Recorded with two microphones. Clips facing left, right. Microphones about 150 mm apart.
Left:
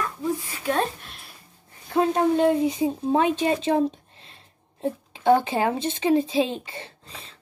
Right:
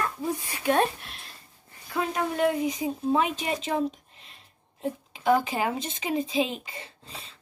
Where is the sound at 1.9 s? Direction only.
30° left (ahead or behind).